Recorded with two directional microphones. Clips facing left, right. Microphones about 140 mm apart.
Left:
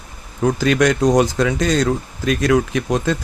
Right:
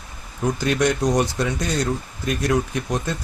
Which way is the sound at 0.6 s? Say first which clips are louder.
Left 4 dB; 90° left.